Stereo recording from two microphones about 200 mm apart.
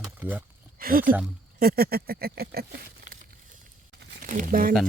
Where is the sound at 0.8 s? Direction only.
45° right (ahead or behind).